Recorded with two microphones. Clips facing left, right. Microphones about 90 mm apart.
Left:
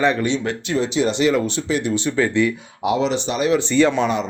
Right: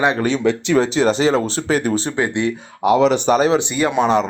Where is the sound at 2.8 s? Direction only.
50° right (ahead or behind).